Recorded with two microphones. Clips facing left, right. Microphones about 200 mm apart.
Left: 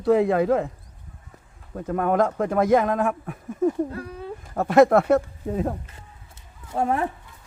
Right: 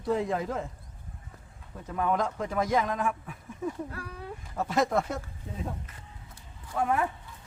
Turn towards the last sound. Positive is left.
turn(degrees=30)  # may be behind; listen again after turning